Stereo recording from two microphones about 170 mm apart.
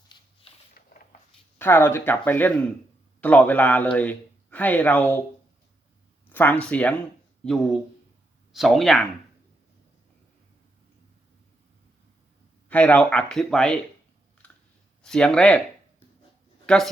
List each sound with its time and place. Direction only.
0.8 s a sound: 65° left (ahead or behind)
1.5 s speech: 10° left (ahead or behind)
6.2 s speech: 10° left (ahead or behind)
12.6 s speech: 10° left (ahead or behind)
14.4 s clicking: 10° left (ahead or behind)
15.0 s speech: 5° left (ahead or behind)
16.6 s speech: centre (ahead or behind)